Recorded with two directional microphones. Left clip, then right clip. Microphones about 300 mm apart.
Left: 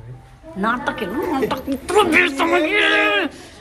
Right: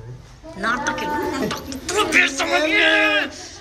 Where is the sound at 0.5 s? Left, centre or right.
Centre.